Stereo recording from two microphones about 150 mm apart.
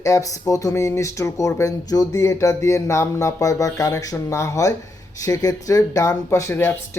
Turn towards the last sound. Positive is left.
turn(degrees=15)  # may be behind; listen again after turning